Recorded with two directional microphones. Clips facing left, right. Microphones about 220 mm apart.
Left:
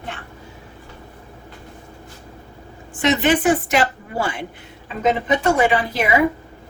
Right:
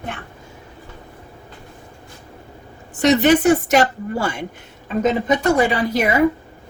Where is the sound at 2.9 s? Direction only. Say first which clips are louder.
Right 4 dB; 40° right (ahead or behind).